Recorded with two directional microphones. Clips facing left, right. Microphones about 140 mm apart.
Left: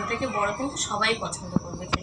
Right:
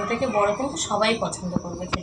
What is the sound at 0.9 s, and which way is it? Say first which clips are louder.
Speech: right 8 dB; 35° right (ahead or behind).